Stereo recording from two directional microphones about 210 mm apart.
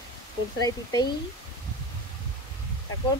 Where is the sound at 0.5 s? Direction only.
20° left (ahead or behind).